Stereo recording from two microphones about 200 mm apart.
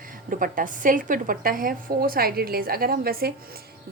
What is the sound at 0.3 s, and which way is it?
A woman's voice, 45° right (ahead or behind).